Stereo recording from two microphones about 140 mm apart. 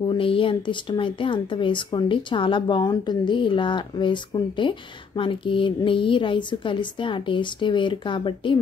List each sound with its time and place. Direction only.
0.0 s speech: 35° left (ahead or behind)